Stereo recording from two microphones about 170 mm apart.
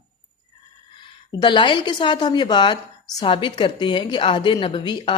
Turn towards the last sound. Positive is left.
turn(degrees=30)  # may be behind; listen again after turning